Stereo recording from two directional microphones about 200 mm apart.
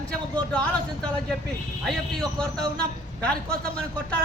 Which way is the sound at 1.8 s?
Centre (ahead or behind).